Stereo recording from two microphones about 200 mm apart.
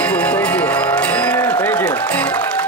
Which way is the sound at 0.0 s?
5° left (ahead or behind).